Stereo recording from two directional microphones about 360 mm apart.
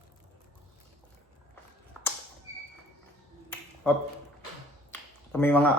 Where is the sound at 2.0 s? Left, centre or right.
Centre.